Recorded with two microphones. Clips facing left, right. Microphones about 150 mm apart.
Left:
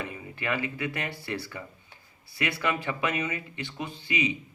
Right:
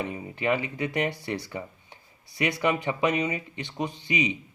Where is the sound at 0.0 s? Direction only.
20° right (ahead or behind).